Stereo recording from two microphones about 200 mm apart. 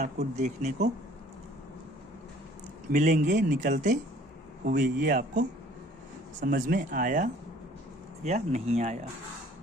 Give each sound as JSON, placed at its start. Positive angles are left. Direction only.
{"t": 0.0, "sound": "speech", "side_deg": -35}
{"t": 2.9, "sound": "speech", "side_deg": -40}